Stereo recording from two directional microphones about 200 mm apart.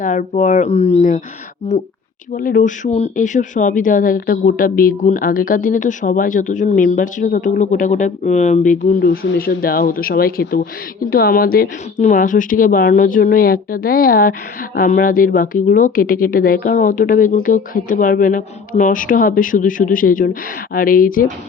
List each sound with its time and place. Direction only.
0.0 s speech: 40° left (ahead or behind)
2.3 s a woman's voice: 45° left (ahead or behind)